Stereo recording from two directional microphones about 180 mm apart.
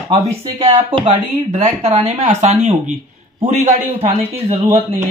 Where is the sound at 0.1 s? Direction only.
35° right (ahead or behind).